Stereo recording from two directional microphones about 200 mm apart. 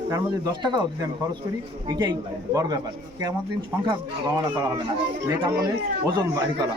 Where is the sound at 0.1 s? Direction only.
20° right (ahead or behind).